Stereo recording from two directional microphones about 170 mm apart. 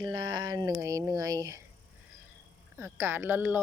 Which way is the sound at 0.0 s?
25° right (ahead or behind).